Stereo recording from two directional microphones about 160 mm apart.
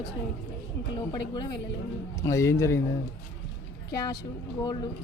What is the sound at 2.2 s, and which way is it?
Speech, 20° left (ahead or behind).